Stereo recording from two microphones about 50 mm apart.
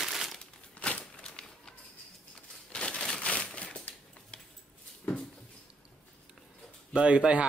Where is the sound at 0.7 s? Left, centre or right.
Left.